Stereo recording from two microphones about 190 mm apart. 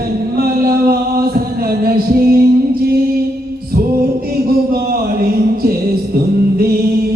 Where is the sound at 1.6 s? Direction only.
50° right (ahead or behind).